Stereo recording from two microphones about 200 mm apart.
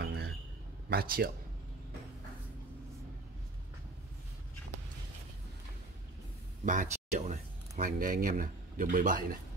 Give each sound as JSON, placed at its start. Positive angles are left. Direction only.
{"t": 0.0, "sound": "a sound", "side_deg": -55}
{"t": 0.8, "sound": "speech", "side_deg": -50}
{"t": 6.6, "sound": "speech", "side_deg": -40}